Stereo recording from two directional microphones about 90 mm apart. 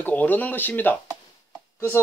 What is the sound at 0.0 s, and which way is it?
Speech, 20° left (ahead or behind).